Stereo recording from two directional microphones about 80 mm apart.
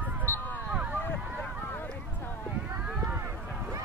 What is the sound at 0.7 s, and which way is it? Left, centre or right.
Vehicle, centre.